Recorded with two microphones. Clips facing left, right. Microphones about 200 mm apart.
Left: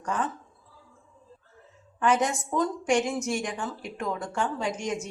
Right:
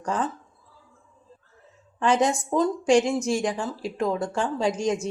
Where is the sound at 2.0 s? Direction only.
30° right (ahead or behind).